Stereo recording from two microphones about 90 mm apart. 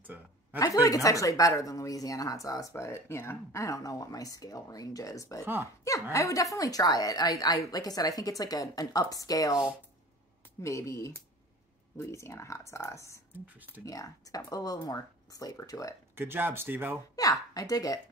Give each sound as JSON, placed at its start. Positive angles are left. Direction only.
{"t": 0.0, "sound": "a sound", "side_deg": -20}
{"t": 0.6, "sound": "speech", "side_deg": 40}
{"t": 5.4, "sound": "speech", "side_deg": -25}
{"t": 6.1, "sound": "speech", "side_deg": 40}
{"t": 10.6, "sound": "speech", "side_deg": 35}
{"t": 13.3, "sound": "speech", "side_deg": -20}
{"t": 13.8, "sound": "speech", "side_deg": 40}
{"t": 16.2, "sound": "speech", "side_deg": -25}
{"t": 17.1, "sound": "speech", "side_deg": 40}